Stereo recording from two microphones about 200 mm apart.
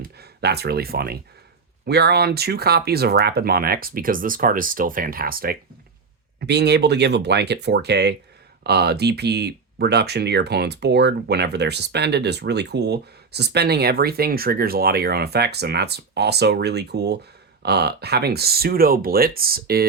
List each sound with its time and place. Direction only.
0.2 s speech: 55° right (ahead or behind)